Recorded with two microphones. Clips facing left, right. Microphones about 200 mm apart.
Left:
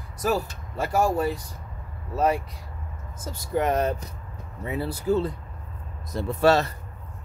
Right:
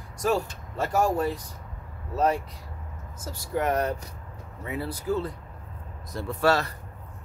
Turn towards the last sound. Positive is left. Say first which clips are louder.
# left 4 dB
turn(degrees=25)  # may be behind; listen again after turning